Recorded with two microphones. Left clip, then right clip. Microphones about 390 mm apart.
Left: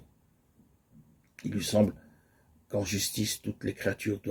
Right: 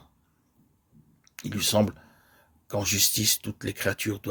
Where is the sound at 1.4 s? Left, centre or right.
Right.